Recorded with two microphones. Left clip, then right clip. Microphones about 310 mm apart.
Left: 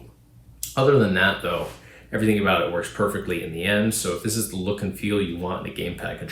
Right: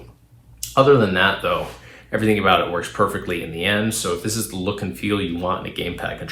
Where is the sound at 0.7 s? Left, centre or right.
Centre.